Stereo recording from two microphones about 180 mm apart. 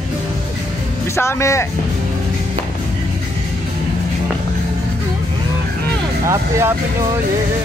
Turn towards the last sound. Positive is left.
turn(degrees=-15)  # may be behind; listen again after turning